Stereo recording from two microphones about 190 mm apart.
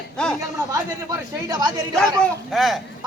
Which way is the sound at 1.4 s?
20° right (ahead or behind).